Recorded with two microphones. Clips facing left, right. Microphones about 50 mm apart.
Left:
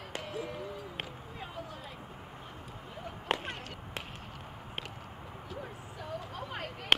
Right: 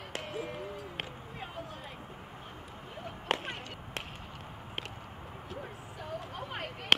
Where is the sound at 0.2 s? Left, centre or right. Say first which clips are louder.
Even; right.